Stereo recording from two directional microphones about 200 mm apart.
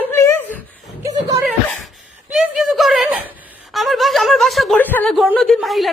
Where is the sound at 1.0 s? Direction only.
15° right (ahead or behind).